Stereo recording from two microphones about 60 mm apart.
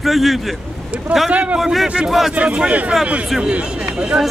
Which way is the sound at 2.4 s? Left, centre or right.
Right.